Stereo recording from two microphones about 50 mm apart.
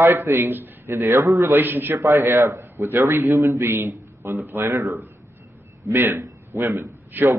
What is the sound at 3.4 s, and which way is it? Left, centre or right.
Speech, right.